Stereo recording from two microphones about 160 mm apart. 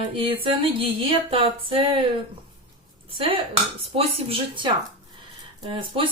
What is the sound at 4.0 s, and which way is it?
Speech, 35° right (ahead or behind).